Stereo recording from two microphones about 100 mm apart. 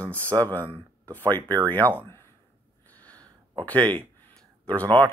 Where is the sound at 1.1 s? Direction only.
20° left (ahead or behind).